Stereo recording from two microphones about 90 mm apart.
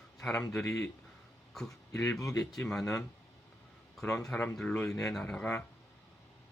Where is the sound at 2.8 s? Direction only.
35° left (ahead or behind).